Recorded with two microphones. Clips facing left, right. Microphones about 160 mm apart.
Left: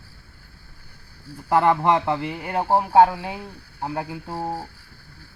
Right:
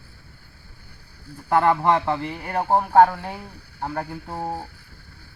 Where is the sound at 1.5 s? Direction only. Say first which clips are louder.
Even; 20° left (ahead or behind).